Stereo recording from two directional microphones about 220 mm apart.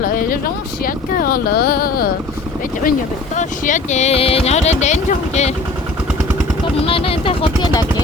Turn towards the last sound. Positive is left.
turn(degrees=20)  # may be behind; listen again after turning